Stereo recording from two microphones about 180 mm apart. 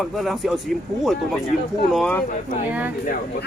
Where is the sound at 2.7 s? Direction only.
10° right (ahead or behind).